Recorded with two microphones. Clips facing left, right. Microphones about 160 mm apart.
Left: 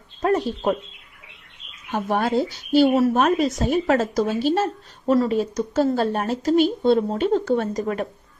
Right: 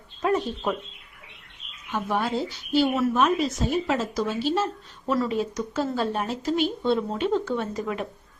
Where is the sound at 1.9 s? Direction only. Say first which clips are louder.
Left 4 dB; 45° left (ahead or behind).